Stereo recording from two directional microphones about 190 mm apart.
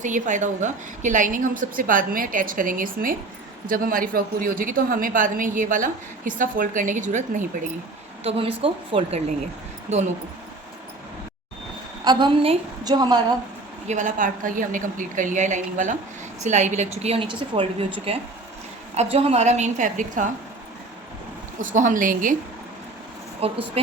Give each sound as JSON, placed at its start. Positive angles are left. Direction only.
{"t": 0.0, "sound": "a woman's voice", "side_deg": -40}
{"t": 8.2, "sound": "a woman's voice", "side_deg": -30}
{"t": 12.0, "sound": "a woman's voice", "side_deg": -25}
{"t": 13.8, "sound": "a woman's voice", "side_deg": -40}
{"t": 21.6, "sound": "a woman's voice", "side_deg": -45}
{"t": 23.4, "sound": "a woman's voice", "side_deg": -30}